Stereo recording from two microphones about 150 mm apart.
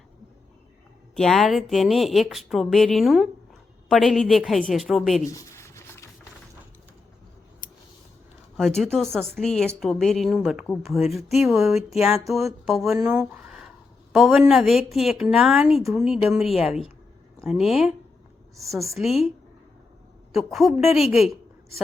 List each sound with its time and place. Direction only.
1.1 s a woman's voice: centre (ahead or behind)
5.2 s writing: 20° left (ahead or behind)
8.5 s a woman's voice: centre (ahead or behind)
20.3 s a woman's voice: centre (ahead or behind)